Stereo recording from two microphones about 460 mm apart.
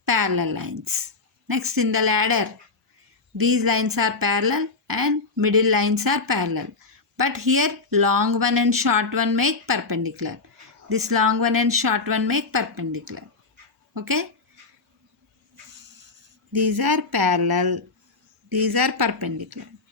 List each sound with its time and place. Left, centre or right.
0.0 s a woman's voice: right
13.9 s speech: right
16.6 s a woman's voice: right